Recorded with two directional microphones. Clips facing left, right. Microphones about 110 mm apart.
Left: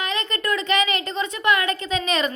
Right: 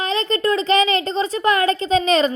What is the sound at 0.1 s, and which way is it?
A woman's voice, 30° right (ahead or behind).